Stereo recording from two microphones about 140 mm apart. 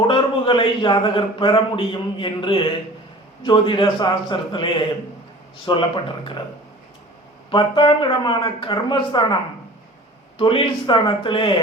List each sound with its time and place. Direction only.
0.1 s a man's voice: 35° left (ahead or behind)
7.5 s a man's voice: 35° left (ahead or behind)